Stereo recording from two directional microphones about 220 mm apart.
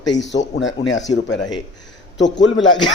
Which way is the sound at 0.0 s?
55° left (ahead or behind).